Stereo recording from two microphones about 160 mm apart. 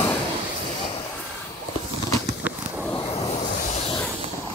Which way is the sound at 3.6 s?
50° left (ahead or behind).